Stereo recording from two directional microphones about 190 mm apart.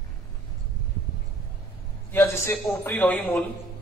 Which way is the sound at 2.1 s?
15° left (ahead or behind).